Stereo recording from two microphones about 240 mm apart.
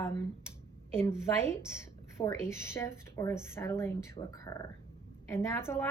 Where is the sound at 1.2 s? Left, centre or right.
Centre.